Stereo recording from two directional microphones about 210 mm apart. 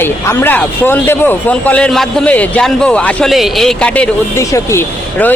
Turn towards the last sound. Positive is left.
turn(degrees=10)  # may be behind; listen again after turning